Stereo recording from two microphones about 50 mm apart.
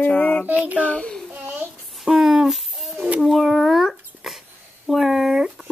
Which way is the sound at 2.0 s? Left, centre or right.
Centre.